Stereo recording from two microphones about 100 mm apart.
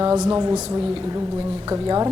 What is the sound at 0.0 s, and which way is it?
A woman's voice, 35° right (ahead or behind).